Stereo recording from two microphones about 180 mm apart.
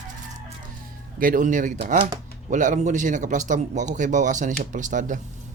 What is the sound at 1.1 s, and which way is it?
Speech, 50° right (ahead or behind).